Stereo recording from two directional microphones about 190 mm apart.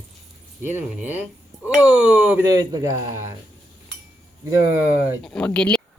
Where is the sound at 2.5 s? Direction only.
20° right (ahead or behind).